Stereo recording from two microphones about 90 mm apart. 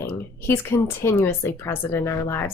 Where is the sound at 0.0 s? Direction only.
25° left (ahead or behind).